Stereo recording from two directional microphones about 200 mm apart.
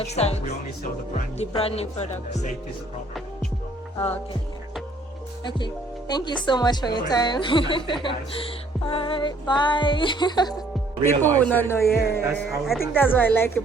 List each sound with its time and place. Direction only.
0.0 s music: 30° left (ahead or behind)
3.9 s music: 15° left (ahead or behind)
5.5 s speech: 25° left (ahead or behind)
11.0 s a man's voice: 10° left (ahead or behind)
12.4 s speech: centre (ahead or behind)
12.9 s a man's voice: 10° left (ahead or behind)